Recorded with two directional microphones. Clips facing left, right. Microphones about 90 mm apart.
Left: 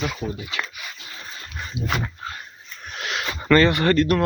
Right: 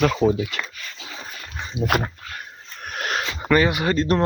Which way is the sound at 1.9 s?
55° right (ahead or behind).